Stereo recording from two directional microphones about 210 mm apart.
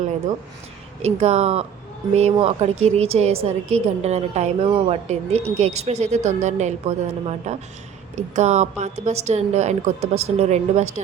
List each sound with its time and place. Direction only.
1.0 s a woman's voice: 30° right (ahead or behind)